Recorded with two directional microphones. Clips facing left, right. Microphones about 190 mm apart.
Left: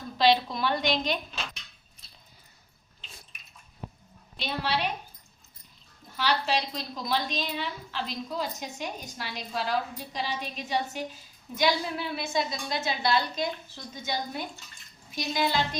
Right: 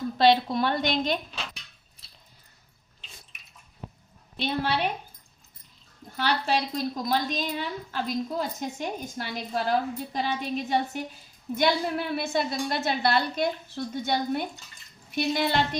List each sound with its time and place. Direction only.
0.2 s a woman's voice: 50° right (ahead or behind)
4.4 s a woman's voice: 55° right (ahead or behind)
6.1 s a woman's voice: 55° right (ahead or behind)